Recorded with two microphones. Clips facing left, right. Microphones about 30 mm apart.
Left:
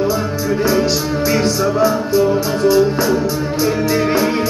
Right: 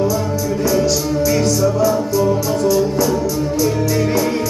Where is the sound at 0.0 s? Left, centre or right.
Left.